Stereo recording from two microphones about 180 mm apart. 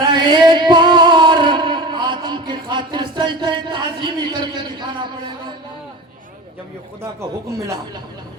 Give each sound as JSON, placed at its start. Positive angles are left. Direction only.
{"t": 0.1, "sound": "music", "side_deg": -25}